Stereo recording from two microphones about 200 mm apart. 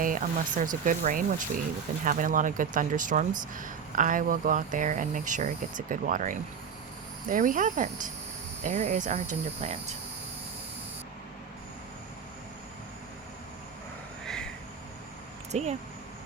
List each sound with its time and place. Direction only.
0.0 s speech: 40° right (ahead or behind)
14.3 s a sound: 5° left (ahead or behind)
15.5 s speech: 35° right (ahead or behind)